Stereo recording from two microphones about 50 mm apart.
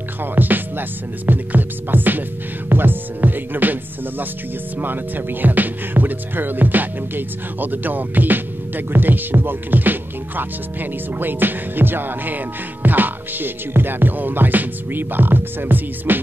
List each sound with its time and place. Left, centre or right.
0.2 s speech: right
4.7 s speech: right